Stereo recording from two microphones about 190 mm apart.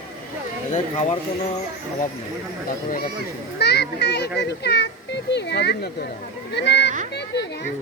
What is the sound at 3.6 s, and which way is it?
A child's voice, 60° left (ahead or behind).